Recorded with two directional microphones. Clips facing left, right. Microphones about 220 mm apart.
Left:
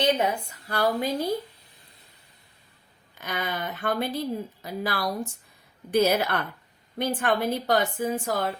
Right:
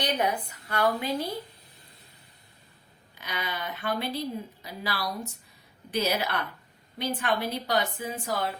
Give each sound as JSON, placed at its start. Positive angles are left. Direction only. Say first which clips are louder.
{"t": 0.0, "sound": "a woman's voice", "louder": "left 4 dB", "side_deg": 25}
{"t": 3.2, "sound": "speech", "louder": "left 4 dB", "side_deg": 50}